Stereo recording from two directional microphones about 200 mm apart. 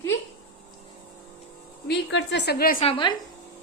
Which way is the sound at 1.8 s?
60° left (ahead or behind).